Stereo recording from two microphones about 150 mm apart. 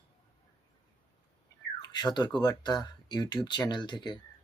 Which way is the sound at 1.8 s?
30° left (ahead or behind).